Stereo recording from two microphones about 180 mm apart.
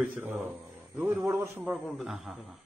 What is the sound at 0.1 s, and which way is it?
Speech, 10° right (ahead or behind).